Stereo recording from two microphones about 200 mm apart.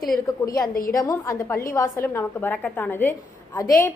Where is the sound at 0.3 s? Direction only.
15° left (ahead or behind).